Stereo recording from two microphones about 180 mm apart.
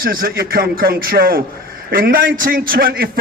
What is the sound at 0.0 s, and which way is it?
A man's voice, 55° right (ahead or behind).